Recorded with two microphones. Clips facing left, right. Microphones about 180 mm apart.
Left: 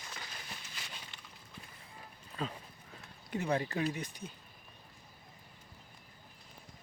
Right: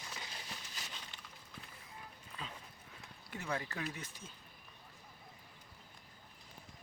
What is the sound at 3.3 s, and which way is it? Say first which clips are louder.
Speech: left 8 dB; 20° left (ahead or behind).